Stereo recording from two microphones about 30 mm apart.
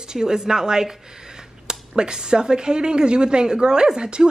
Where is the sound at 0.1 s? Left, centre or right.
Right.